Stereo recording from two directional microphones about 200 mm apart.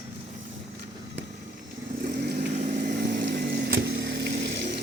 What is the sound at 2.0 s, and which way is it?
Vehicle, 45° right (ahead or behind).